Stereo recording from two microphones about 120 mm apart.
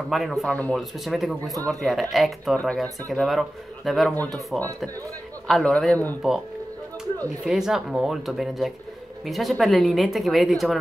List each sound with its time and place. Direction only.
0.1 s speech: centre (ahead or behind)
0.5 s a man's voice: 15° left (ahead or behind)
0.7 s a man's voice: centre (ahead or behind)
4.5 s speech: 15° right (ahead or behind)
5.5 s a man's voice: 5° left (ahead or behind)
7.4 s speech: 5° right (ahead or behind)